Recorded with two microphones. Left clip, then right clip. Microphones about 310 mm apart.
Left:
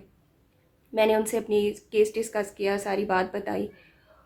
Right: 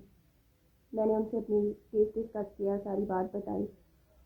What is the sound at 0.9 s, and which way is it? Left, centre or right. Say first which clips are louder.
A woman's voice: left 8 dB; left.